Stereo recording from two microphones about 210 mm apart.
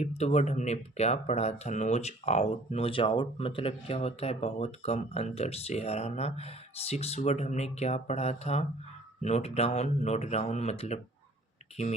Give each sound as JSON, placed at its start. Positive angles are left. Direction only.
{"t": 0.0, "sound": "speech", "side_deg": 30}